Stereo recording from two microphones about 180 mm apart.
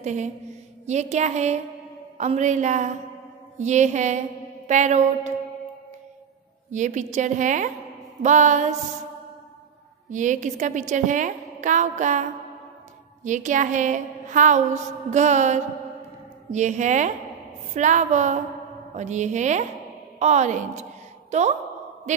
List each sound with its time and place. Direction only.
0.0 s a woman's voice: 40° right (ahead or behind)
6.7 s a woman's voice: 45° right (ahead or behind)
10.0 s a woman's voice: 45° right (ahead or behind)